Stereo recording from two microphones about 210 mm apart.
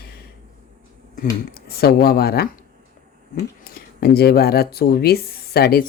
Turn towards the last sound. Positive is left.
turn(degrees=45)  # may be behind; listen again after turning